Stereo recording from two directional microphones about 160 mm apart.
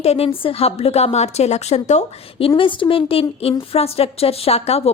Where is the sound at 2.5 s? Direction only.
30° left (ahead or behind).